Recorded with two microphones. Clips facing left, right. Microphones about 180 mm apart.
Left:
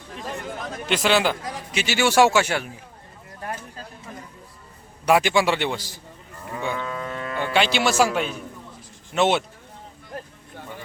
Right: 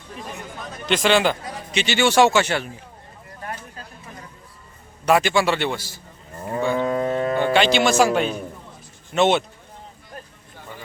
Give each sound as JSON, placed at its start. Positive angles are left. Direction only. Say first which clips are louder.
{"t": 0.9, "sound": "speech", "louder": "right 2 dB", "side_deg": 5}
{"t": 5.0, "sound": "speech", "louder": "right 1 dB", "side_deg": 10}
{"t": 6.3, "sound": "moo", "louder": "right 7 dB", "side_deg": -40}
{"t": 7.5, "sound": "speech", "louder": "right 1 dB", "side_deg": 5}